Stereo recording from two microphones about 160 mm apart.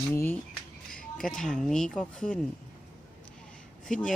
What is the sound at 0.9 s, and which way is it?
Speech, 5° left (ahead or behind).